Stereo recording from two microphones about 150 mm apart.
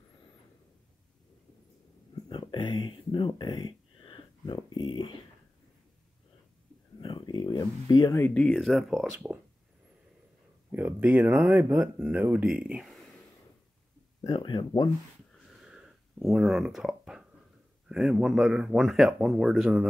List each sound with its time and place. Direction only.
2.2 s speech: 30° left (ahead or behind)
7.0 s a sound: 30° left (ahead or behind)
8.3 s speech: 5° left (ahead or behind)
10.7 s speech: 10° right (ahead or behind)
14.2 s speech: 30° left (ahead or behind)
15.6 s a sound: 5° right (ahead or behind)
17.8 s speech: 5° right (ahead or behind)